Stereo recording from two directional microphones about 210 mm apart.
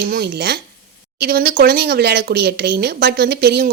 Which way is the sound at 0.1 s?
50° right (ahead or behind).